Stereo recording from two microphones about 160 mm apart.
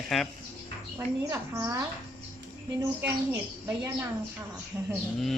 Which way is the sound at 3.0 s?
15° right (ahead or behind).